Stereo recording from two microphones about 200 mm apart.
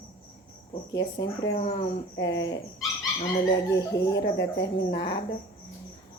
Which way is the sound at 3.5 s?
20° left (ahead or behind).